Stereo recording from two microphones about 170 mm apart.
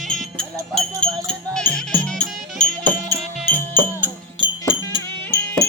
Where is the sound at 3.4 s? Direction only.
10° left (ahead or behind).